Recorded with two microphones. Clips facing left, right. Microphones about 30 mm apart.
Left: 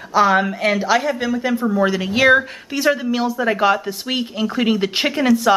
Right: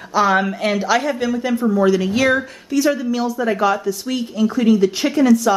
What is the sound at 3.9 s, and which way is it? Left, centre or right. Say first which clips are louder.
Speech: right 1 dB; left.